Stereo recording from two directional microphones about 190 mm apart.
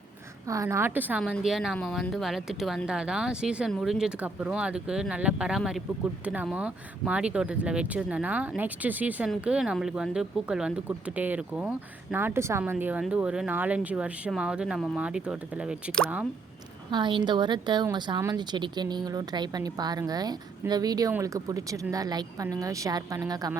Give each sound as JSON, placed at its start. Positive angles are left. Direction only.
{"t": 0.4, "sound": "speech", "side_deg": -15}
{"t": 16.9, "sound": "speech", "side_deg": -25}